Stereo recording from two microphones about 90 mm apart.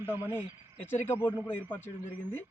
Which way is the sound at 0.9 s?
25° left (ahead or behind).